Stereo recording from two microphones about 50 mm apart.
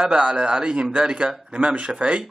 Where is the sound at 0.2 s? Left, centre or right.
Right.